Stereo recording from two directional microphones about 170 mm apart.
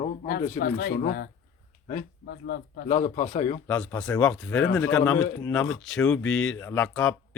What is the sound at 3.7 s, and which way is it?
A man's voice, 5° left (ahead or behind).